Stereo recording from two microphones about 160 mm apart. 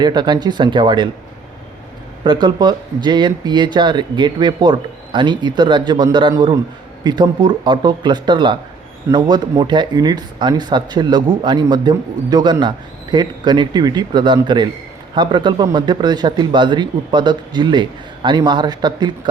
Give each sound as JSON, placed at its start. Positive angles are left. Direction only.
{"t": 0.0, "sound": "speech", "side_deg": -25}
{"t": 2.2, "sound": "speech", "side_deg": -30}